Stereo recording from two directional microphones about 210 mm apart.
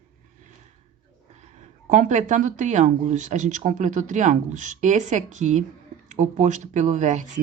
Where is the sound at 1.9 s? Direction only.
35° right (ahead or behind).